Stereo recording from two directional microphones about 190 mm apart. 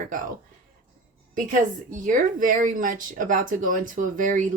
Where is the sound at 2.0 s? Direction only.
45° right (ahead or behind).